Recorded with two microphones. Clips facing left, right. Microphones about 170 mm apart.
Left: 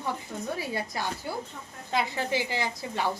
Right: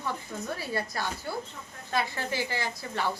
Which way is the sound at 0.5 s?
15° left (ahead or behind).